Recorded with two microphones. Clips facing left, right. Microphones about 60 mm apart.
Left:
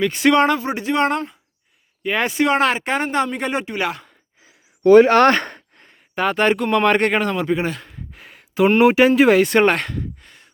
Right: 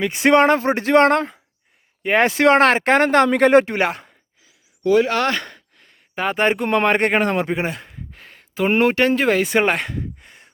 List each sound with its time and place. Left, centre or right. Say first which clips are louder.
0.1 s speech: right 1 dB; right
2.0 s speech: right 4 dB; right
3.8 s speech: right 3 dB; right
4.4 s a sound: left 6 dB; left
6.1 s speech: left 1 dB; centre
7.9 s a sound: left 1 dB; centre
8.8 s speech: left 4 dB; centre